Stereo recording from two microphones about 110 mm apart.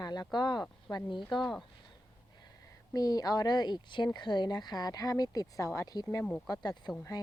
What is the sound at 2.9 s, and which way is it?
Speech, 35° left (ahead or behind).